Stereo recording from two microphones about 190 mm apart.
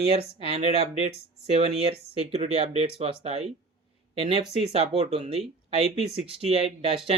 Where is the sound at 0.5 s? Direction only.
35° right (ahead or behind).